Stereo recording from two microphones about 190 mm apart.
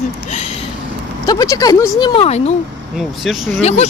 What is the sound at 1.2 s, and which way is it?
Speech, 20° left (ahead or behind).